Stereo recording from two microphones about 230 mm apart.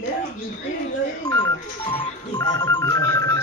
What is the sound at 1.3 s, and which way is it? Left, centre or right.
Music, centre.